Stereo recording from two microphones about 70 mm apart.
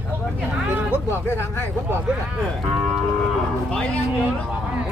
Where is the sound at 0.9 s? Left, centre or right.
Left.